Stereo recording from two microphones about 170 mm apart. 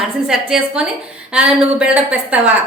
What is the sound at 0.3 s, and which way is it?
A woman's voice, 5° right (ahead or behind).